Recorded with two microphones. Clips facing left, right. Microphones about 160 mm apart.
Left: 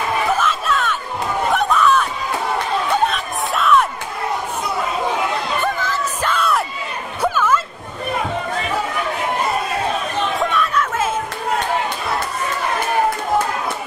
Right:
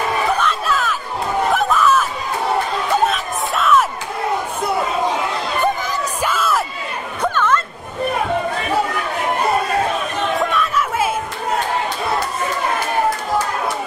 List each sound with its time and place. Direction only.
0.3 s crowd: centre (ahead or behind)
1.5 s a sound: centre (ahead or behind)
3.1 s music: centre (ahead or behind)
5.6 s a sound: 15° right (ahead or behind)
6.3 s crowd: centre (ahead or behind)
7.2 s chatter: 5° left (ahead or behind)
10.3 s chatter: centre (ahead or behind)